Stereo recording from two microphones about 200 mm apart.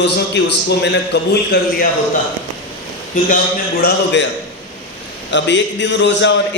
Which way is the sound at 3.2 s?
40° left (ahead or behind).